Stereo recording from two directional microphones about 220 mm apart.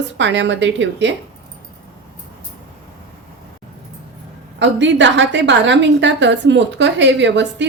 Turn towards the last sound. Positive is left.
turn(degrees=-55)  # may be behind; listen again after turning